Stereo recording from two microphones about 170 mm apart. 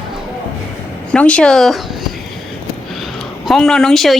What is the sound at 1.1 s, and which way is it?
Speech, 5° left (ahead or behind).